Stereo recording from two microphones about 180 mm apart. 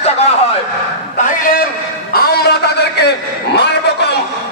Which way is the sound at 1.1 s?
45° left (ahead or behind).